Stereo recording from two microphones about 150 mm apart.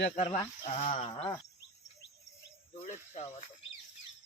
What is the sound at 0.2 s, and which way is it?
Speech, 40° left (ahead or behind).